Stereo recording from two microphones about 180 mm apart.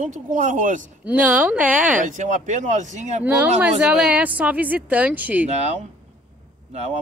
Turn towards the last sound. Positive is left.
turn(degrees=-35)  # may be behind; listen again after turning